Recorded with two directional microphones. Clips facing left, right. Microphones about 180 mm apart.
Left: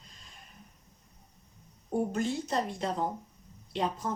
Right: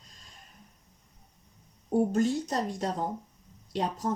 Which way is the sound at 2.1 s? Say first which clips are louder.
Right 3 dB; 40° right (ahead or behind).